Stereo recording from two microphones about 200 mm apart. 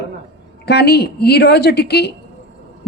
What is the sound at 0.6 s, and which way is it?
A woman's voice, 55° left (ahead or behind).